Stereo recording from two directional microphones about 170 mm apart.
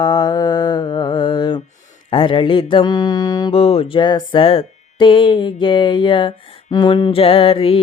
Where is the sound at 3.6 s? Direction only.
35° left (ahead or behind).